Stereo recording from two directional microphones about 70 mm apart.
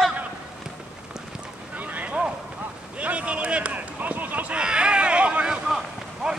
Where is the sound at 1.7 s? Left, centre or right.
Right.